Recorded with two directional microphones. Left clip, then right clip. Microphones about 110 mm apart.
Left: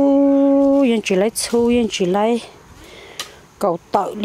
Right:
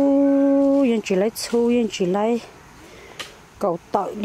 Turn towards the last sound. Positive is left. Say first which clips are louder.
# left 4 dB
turn(degrees=15)  # may be behind; listen again after turning